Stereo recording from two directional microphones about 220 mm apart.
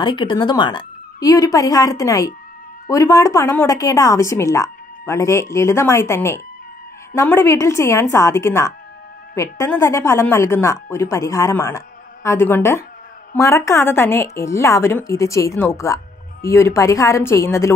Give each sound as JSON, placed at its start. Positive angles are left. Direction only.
{"t": 0.0, "sound": "speech", "side_deg": 20}